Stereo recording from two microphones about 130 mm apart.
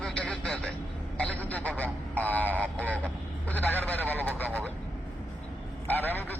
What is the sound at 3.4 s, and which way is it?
Vehicle, 15° left (ahead or behind).